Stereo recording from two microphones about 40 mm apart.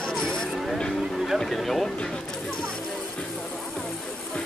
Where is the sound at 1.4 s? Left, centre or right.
Centre.